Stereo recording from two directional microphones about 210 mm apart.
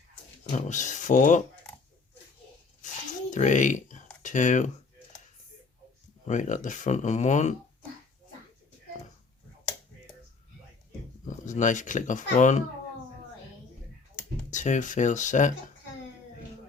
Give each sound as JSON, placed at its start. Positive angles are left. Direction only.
{"t": 0.5, "sound": "speech", "side_deg": 35}
{"t": 2.8, "sound": "a sound", "side_deg": 35}
{"t": 3.2, "sound": "speech", "side_deg": 35}
{"t": 6.2, "sound": "speech", "side_deg": 35}
{"t": 11.3, "sound": "speech", "side_deg": 35}
{"t": 14.5, "sound": "speech", "side_deg": 35}